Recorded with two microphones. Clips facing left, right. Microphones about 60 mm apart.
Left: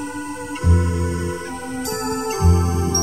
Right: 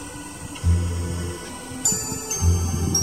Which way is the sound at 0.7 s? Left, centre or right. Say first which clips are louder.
Left 7 dB; left.